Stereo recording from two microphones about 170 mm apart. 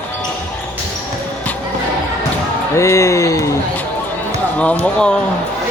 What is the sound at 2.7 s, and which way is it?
Speech, 15° left (ahead or behind).